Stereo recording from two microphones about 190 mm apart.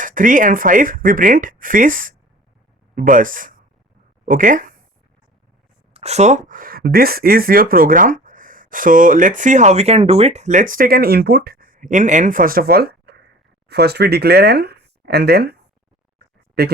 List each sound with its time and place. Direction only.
0.0 s speech: 45° right (ahead or behind)
5.9 s speech: 35° right (ahead or behind); by 15.5 s 55° right (ahead or behind)
16.1 s a sound: 55° right (ahead or behind)